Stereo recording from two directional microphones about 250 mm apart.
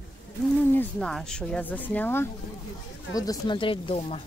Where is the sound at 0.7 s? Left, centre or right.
Centre; by 4.2 s left.